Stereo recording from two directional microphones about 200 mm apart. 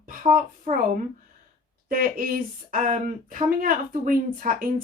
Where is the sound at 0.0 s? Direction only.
45° right (ahead or behind).